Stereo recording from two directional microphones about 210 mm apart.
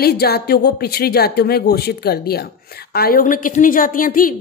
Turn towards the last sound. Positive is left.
turn(degrees=40)  # may be behind; listen again after turning